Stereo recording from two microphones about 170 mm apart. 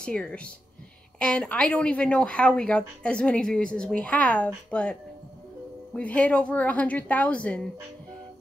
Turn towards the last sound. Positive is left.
turn(degrees=5)  # may be behind; listen again after turning